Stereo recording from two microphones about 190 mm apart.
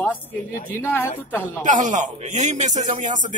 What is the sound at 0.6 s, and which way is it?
Speech, 10° left (ahead or behind).